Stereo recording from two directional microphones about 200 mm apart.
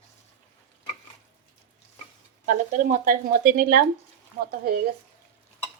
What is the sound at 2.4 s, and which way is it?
Speech, 40° right (ahead or behind).